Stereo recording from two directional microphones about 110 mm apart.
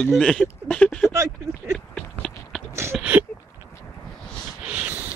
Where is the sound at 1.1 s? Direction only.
25° right (ahead or behind).